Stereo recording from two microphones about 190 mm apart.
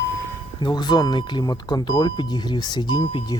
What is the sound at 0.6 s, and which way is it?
Speech, 20° left (ahead or behind).